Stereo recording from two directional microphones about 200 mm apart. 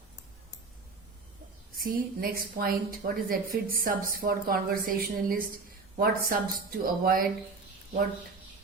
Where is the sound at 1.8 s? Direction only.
45° right (ahead or behind).